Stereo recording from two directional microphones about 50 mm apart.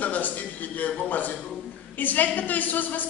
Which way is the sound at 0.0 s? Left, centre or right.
Left.